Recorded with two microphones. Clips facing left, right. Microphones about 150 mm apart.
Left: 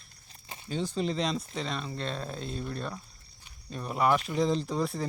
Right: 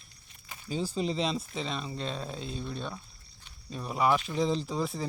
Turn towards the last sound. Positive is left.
turn(degrees=0)  # may be behind; listen again after turning